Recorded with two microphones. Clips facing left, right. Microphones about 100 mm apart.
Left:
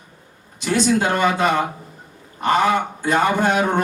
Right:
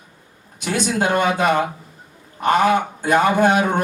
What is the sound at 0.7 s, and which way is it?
A man's voice, 55° right (ahead or behind).